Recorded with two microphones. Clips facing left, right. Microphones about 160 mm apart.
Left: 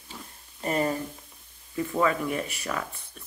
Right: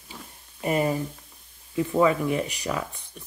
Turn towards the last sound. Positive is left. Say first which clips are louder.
# right 2 dB
turn(degrees=-15)  # may be behind; listen again after turning